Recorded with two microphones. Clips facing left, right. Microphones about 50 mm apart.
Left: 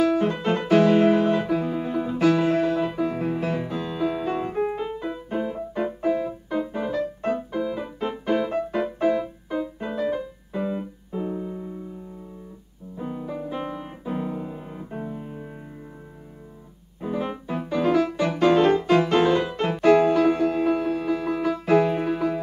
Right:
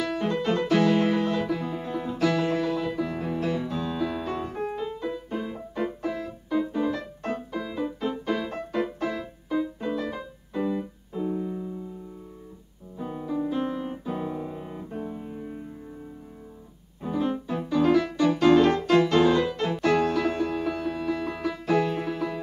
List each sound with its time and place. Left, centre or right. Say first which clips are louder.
0.1 s music: left 3 dB; centre
8.5 s music: left 4 dB; centre
9.1 s music: left 3 dB; left
10.7 s keyboard: left 1 dB; left
13.0 s music: right 2 dB; centre
15.0 s piano: left 1 dB; centre
17.0 s music: right 1 dB; centre